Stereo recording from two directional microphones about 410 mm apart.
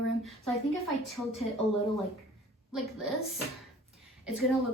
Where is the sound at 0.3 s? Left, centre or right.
Centre.